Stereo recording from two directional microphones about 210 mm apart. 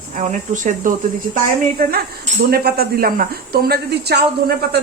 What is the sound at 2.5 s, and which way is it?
Speech, 45° right (ahead or behind).